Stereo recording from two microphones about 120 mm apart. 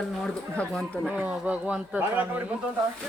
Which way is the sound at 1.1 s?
10° right (ahead or behind).